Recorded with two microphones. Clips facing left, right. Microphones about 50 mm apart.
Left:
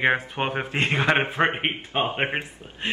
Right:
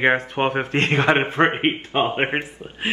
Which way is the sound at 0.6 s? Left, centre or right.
Centre.